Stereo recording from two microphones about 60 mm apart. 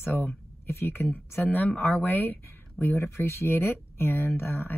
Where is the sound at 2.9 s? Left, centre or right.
Left.